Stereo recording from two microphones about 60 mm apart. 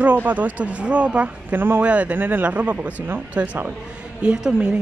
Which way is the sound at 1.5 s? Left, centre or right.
Right.